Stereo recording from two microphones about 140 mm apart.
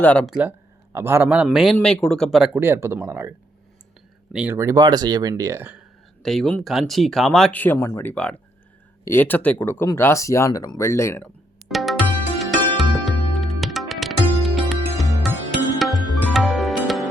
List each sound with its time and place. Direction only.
0.0 s speech: 10° left (ahead or behind)
0.3 s speech: 10° right (ahead or behind)
1.5 s speech: centre (ahead or behind)
2.6 s speech: 15° right (ahead or behind)
4.3 s speech: 5° right (ahead or behind)
4.5 s speech: 25° right (ahead or behind)
6.2 s speech: 5° left (ahead or behind); by 11.3 s 20° left (ahead or behind)
11.7 s music: centre (ahead or behind)